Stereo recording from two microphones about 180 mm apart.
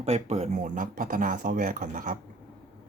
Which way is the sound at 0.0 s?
35° right (ahead or behind).